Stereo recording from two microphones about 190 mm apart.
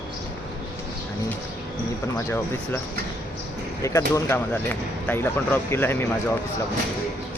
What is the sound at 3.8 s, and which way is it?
Speech, 15° left (ahead or behind).